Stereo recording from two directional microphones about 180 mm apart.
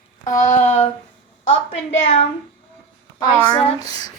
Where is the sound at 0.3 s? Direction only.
45° left (ahead or behind).